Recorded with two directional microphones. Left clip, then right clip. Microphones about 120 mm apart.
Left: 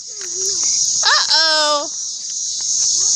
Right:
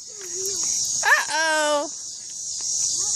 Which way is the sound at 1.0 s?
30° right (ahead or behind).